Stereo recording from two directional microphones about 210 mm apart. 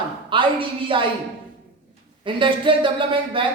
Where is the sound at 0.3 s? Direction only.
25° right (ahead or behind).